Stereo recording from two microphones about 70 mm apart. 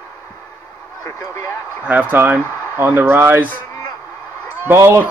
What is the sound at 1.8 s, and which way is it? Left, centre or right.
Speech, right.